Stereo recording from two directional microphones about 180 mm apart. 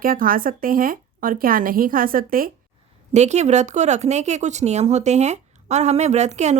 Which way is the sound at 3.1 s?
40° right (ahead or behind).